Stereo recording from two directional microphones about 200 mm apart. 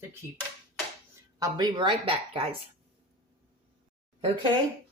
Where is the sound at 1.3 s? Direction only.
20° right (ahead or behind).